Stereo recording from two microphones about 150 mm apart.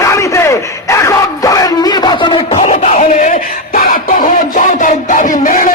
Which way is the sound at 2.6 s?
55° left (ahead or behind).